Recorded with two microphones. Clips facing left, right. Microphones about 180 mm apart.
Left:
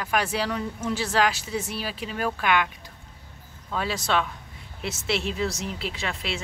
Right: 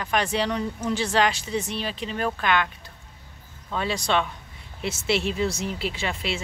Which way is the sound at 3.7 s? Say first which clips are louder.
Right 1 dB; 5° left (ahead or behind).